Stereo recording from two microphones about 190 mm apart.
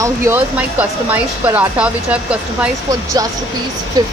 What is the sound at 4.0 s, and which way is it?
Speech, 20° right (ahead or behind).